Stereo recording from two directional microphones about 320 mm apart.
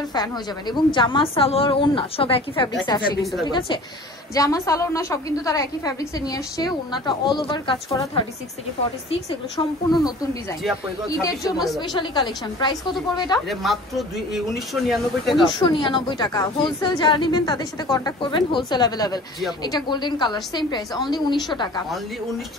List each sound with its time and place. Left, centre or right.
0.1 s a woman's voice: centre
3.2 s speech: centre
3.4 s a woman's voice: centre
9.8 s a woman's voice: centre
11.5 s speech: centre
11.8 s a woman's voice: centre
13.5 s speech: centre
15.5 s a woman's voice: centre